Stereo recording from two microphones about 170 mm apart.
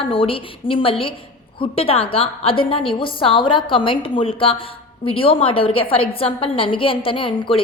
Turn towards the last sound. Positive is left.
turn(degrees=30)  # may be behind; listen again after turning